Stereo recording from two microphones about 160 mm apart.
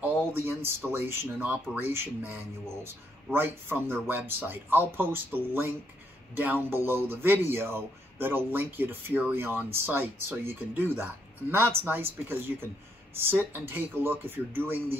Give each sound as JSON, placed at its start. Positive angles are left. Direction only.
{"t": 0.0, "sound": "speech", "side_deg": -15}